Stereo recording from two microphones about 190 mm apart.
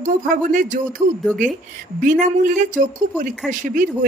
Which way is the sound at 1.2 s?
Centre (ahead or behind).